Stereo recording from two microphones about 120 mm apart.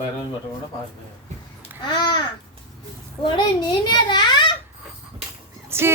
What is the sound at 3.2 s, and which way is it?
A child's voice, 40° left (ahead or behind).